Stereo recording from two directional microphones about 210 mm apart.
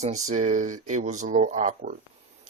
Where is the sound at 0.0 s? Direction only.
35° right (ahead or behind).